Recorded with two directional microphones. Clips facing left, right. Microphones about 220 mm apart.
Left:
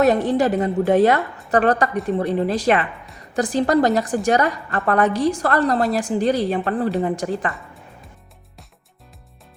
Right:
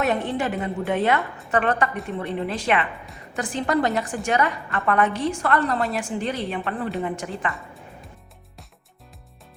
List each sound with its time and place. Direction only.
0.0 s a woman's voice: 40° left (ahead or behind)